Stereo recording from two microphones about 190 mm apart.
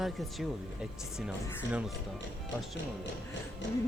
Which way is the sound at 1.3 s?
5° right (ahead or behind).